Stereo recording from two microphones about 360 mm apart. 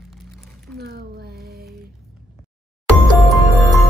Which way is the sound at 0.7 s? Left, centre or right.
Right.